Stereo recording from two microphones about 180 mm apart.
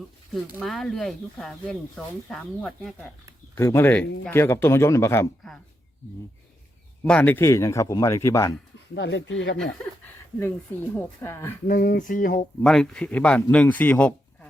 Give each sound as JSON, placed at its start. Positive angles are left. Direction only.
{"t": 0.6, "sound": "speech", "side_deg": 0}
{"t": 3.5, "sound": "a man's voice", "side_deg": 15}
{"t": 7.0, "sound": "a man's voice", "side_deg": 10}
{"t": 9.0, "sound": "speech", "side_deg": 90}
{"t": 10.4, "sound": "a man's voice", "side_deg": 10}
{"t": 11.7, "sound": "speech", "side_deg": 50}
{"t": 12.6, "sound": "a man's voice", "side_deg": 5}